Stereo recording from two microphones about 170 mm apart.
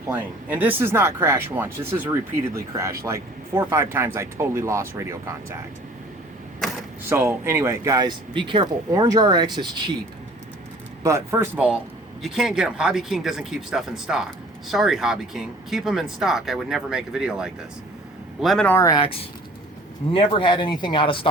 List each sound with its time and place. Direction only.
0.1 s speech: 10° right (ahead or behind)
7.1 s speech: 15° right (ahead or behind)
11.0 s speech: 15° right (ahead or behind); by 18.7 s centre (ahead or behind)
18.7 s speech: 20° left (ahead or behind)